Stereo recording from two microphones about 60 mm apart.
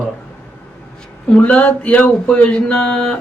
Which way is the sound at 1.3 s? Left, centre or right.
Left.